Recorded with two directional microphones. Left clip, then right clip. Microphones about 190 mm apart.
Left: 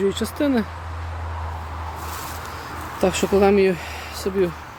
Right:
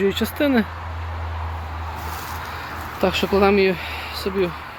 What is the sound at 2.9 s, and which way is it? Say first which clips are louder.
Speech: even; 35° left (ahead or behind).